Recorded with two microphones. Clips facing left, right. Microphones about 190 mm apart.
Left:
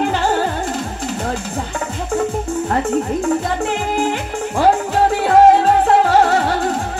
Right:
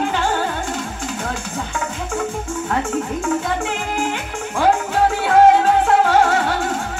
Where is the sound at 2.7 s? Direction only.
35° left (ahead or behind).